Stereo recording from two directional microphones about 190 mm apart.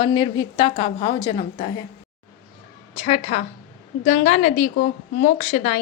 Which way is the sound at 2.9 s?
30° left (ahead or behind).